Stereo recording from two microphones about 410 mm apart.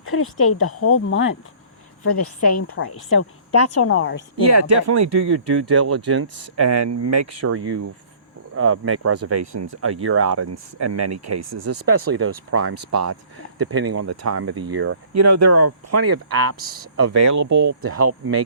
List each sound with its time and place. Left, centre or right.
0.0 s a woman's voice: left
4.4 s speech: right
15.1 s speech: right